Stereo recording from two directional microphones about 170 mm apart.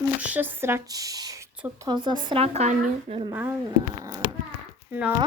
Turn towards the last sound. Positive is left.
turn(degrees=-10)  # may be behind; listen again after turning